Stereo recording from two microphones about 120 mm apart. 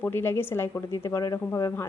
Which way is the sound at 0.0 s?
20° left (ahead or behind).